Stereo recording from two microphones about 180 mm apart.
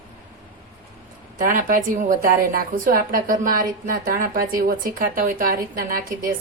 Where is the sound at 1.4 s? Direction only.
50° right (ahead or behind).